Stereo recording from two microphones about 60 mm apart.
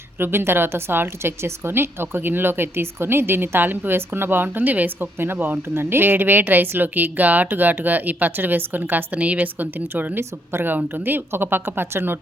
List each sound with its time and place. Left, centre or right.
0.2 s a woman's voice: right